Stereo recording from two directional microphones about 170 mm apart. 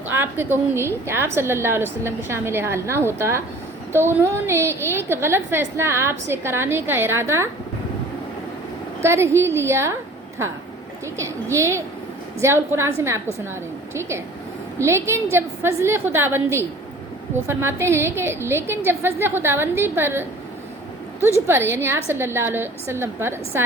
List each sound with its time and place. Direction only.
0.1 s a woman's voice: 10° right (ahead or behind)
9.0 s a woman's voice: 15° right (ahead or behind)
11.0 s a woman's voice: 15° right (ahead or behind)
21.4 s a woman's voice: 15° right (ahead or behind)